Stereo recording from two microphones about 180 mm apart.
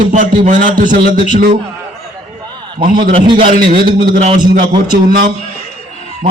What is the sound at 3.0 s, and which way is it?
Speech, 45° right (ahead or behind).